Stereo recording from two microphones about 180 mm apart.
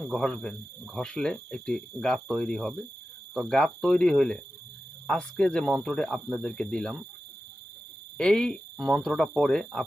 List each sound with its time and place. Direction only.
0.0 s speech: 5° left (ahead or behind)
8.2 s speech: 5° left (ahead or behind)